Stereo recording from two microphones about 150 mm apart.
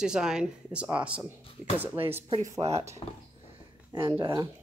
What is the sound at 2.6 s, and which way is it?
Speech, 45° right (ahead or behind).